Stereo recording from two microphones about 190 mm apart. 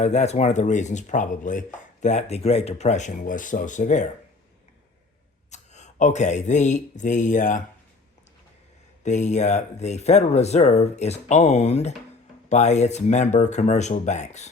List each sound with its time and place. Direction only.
0.0 s chopping: 35° left (ahead or behind)
5.5 s speech: 40° left (ahead or behind)
9.0 s chopping: 40° left (ahead or behind)